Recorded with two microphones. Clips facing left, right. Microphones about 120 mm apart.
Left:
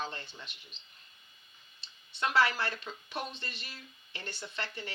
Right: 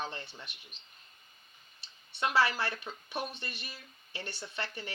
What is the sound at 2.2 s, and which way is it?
Speech, 25° right (ahead or behind).